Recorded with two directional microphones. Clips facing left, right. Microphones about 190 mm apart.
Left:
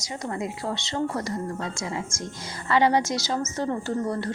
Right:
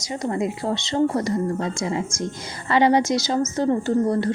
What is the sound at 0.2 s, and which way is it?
A woman's voice, 20° right (ahead or behind).